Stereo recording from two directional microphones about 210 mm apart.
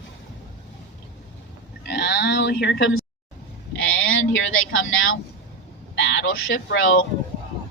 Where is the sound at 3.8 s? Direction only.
70° left (ahead or behind).